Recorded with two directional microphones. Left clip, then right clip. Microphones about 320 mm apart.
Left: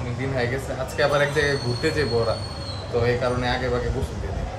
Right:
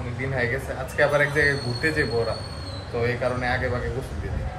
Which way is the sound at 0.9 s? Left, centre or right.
Centre.